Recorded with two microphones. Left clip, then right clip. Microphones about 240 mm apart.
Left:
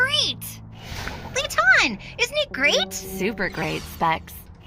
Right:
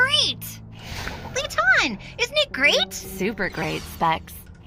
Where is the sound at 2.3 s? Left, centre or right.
Centre.